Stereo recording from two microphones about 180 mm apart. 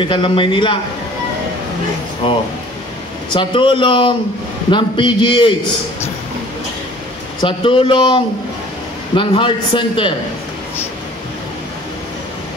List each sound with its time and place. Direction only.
0.0 s a man's voice: 25° left (ahead or behind)
2.2 s a man's voice: 30° left (ahead or behind)
7.4 s a man's voice: 30° left (ahead or behind)